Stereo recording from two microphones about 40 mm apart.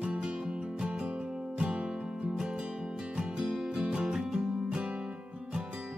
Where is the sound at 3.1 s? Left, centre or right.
Right.